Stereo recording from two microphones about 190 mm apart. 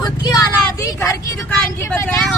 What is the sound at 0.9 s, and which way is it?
Speech, 15° left (ahead or behind).